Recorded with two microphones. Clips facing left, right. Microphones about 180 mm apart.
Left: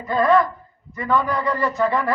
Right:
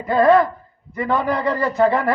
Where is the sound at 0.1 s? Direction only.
30° right (ahead or behind).